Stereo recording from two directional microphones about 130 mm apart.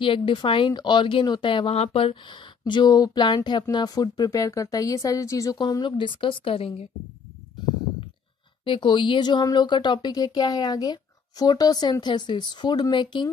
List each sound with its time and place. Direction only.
0.0 s speech: 40° left (ahead or behind)
8.6 s speech: 40° left (ahead or behind)